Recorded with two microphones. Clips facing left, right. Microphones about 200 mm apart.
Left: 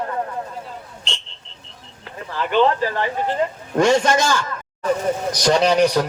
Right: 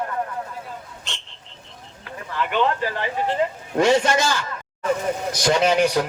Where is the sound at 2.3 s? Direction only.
35° left (ahead or behind).